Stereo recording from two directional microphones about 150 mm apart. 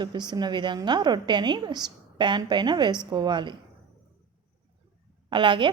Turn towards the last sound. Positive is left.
turn(degrees=-35)  # may be behind; listen again after turning